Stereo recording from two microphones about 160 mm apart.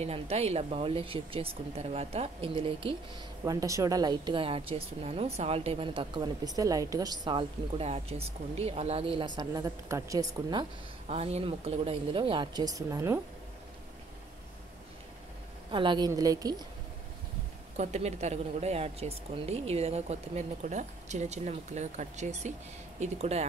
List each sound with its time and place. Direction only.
0.0 s a woman's voice: 40° right (ahead or behind)
3.4 s a woman's voice: 20° right (ahead or behind); by 9.3 s 35° right (ahead or behind)
9.4 s a woman's voice: 25° right (ahead or behind)
11.1 s a woman's voice: 40° right (ahead or behind); by 13.2 s 20° right (ahead or behind)
15.7 s a woman's voice: 30° right (ahead or behind)
17.7 s a woman's voice: 45° right (ahead or behind)